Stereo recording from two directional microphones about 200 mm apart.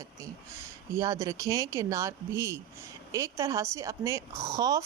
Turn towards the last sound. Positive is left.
turn(degrees=-15)  # may be behind; listen again after turning